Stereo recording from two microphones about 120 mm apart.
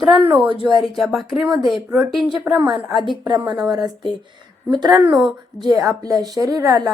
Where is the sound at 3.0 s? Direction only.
40° right (ahead or behind).